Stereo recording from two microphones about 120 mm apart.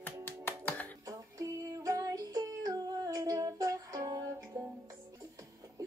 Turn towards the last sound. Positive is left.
turn(degrees=-30)  # may be behind; listen again after turning